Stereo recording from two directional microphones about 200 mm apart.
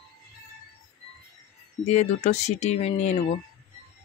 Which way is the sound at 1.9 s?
35° left (ahead or behind).